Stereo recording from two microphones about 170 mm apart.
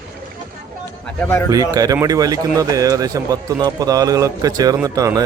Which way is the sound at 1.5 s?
20° right (ahead or behind).